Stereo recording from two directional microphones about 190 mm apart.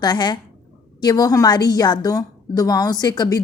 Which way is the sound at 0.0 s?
20° left (ahead or behind).